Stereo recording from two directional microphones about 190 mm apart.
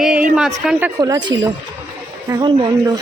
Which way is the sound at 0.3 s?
5° right (ahead or behind).